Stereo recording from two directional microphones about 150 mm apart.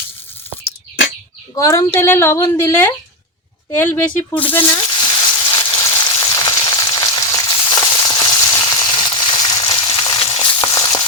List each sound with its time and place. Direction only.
1.5 s speech: 20° left (ahead or behind)
4.8 s frying: 30° left (ahead or behind)